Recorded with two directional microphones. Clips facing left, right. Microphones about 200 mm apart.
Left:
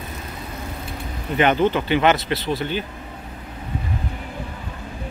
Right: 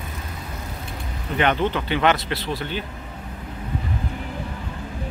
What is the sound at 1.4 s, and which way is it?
Speech, 5° left (ahead or behind).